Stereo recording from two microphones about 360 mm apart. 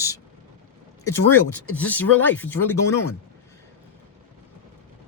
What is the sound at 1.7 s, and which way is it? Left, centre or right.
Speech, centre.